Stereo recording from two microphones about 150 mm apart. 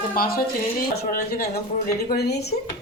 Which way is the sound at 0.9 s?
90° left.